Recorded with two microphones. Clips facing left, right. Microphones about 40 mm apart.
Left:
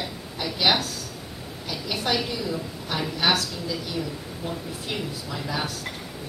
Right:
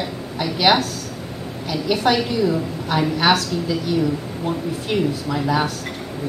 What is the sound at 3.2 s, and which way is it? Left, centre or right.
Speech, right.